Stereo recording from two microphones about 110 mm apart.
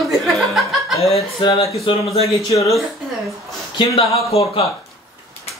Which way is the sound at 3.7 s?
60° left (ahead or behind).